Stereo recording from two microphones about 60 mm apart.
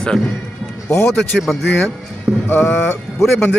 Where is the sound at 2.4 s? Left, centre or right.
Left.